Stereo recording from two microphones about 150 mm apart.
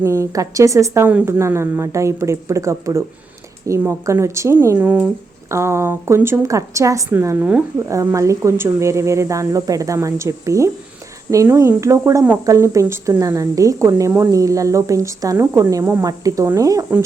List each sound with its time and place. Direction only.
0.0 s a woman's voice: 20° right (ahead or behind)